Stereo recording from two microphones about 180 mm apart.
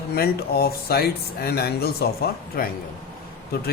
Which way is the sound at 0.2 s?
60° left (ahead or behind).